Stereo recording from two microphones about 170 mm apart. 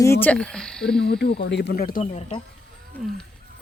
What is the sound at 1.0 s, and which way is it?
Speech, 70° left (ahead or behind).